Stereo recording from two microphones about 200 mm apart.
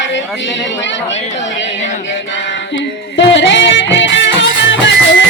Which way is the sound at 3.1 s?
65° left (ahead or behind).